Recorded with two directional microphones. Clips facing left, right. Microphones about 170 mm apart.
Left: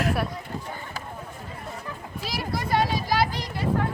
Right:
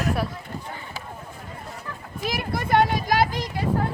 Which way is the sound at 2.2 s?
55° right (ahead or behind).